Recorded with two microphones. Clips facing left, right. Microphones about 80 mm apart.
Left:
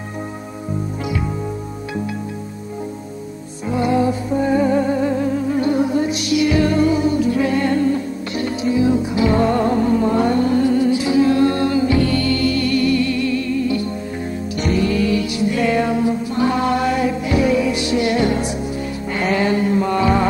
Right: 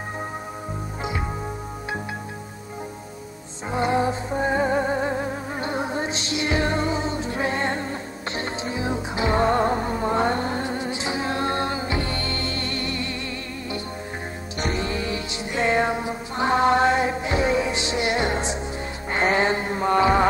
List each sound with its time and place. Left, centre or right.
3.7 s music: right
19.1 s mantra: right